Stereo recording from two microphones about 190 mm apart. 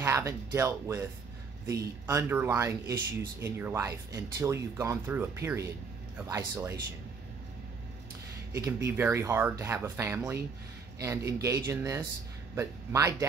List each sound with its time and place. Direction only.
0.0 s speech: 15° right (ahead or behind)
8.5 s speech: 15° right (ahead or behind)